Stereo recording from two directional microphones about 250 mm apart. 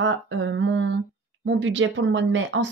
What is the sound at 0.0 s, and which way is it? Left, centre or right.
Speech, right.